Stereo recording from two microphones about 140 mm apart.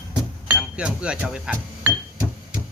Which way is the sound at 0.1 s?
10° right (ahead or behind).